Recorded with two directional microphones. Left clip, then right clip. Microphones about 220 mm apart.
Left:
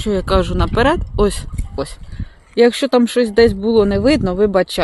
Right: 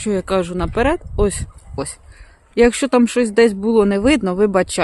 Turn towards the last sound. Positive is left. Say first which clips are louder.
# left 1 dB
turn(degrees=-15)  # may be behind; listen again after turning